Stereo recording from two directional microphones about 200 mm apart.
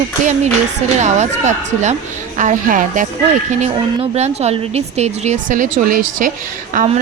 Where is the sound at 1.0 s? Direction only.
35° right (ahead or behind).